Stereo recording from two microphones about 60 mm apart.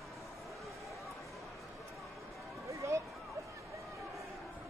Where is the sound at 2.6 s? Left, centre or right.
Right.